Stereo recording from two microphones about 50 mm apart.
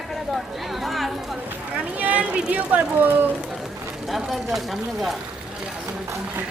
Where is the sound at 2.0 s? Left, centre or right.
Right.